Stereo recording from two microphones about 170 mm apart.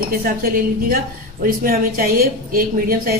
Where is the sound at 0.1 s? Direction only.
60° right (ahead or behind).